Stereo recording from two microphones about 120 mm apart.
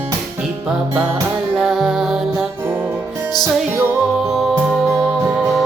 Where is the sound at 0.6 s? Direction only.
5° right (ahead or behind).